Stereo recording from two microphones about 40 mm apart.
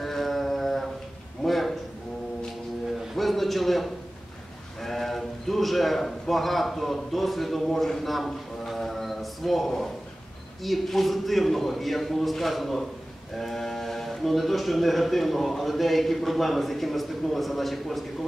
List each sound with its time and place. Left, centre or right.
0.0 s mantra: centre
1.4 s a sound: centre
3.2 s a man's voice: centre